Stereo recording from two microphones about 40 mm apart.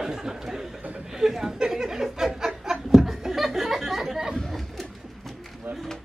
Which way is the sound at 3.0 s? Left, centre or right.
Centre.